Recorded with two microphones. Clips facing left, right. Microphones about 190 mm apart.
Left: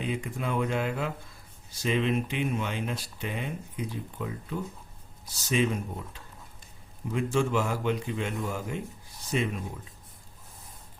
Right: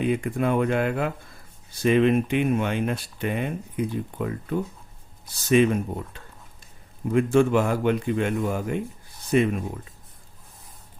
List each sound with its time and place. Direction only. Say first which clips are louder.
0.0 s speech: right 9 dB; 55° right (ahead or behind)